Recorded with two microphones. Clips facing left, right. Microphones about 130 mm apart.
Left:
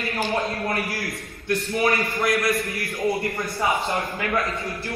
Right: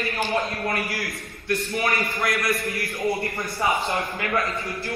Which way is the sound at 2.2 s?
25° left (ahead or behind).